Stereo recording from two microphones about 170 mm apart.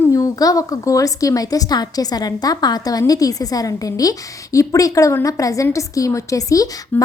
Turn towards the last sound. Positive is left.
turn(degrees=10)  # may be behind; listen again after turning